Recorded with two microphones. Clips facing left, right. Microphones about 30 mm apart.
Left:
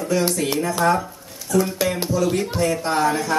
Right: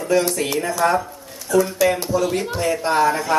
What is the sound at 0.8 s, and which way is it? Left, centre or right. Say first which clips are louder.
Speech: right 1 dB; centre.